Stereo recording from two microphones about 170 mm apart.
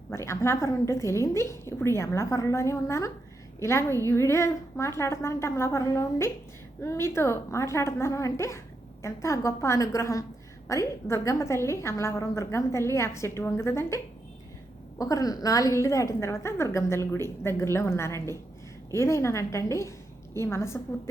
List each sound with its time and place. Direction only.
0.1 s a woman's voice: 15° left (ahead or behind)